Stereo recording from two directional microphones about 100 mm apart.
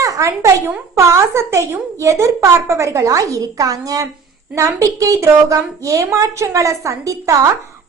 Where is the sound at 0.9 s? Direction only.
30° right (ahead or behind).